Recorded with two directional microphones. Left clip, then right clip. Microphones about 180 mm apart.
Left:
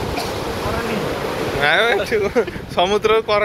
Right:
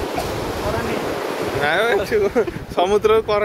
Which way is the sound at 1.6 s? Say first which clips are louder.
Left 3 dB; 20° right (ahead or behind).